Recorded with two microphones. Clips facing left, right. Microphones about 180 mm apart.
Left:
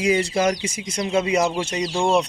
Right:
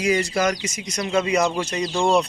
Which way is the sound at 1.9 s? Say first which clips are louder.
Even; 10° left (ahead or behind).